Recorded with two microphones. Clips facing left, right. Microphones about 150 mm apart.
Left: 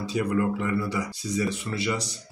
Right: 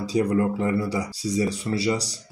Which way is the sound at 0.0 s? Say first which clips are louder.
Right 3 dB; 35° right (ahead or behind).